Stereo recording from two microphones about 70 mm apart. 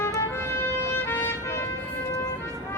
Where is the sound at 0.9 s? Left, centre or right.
Left.